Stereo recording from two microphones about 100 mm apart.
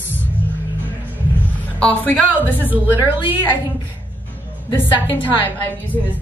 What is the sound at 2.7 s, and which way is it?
Speech, 20° right (ahead or behind).